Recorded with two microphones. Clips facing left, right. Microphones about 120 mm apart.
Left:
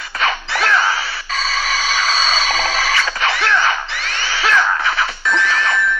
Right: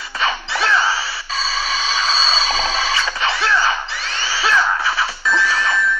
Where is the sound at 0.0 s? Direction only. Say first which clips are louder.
Left 1 dB; 25° right (ahead or behind).